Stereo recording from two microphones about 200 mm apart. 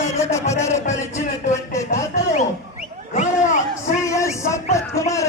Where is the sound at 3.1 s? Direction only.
40° left (ahead or behind).